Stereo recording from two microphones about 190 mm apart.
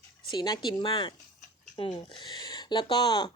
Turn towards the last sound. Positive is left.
turn(degrees=25)  # may be behind; listen again after turning